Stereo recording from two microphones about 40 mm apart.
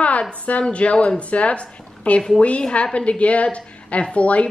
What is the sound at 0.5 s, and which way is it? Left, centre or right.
A woman's voice, left.